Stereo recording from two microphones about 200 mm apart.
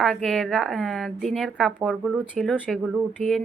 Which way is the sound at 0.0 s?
Centre (ahead or behind).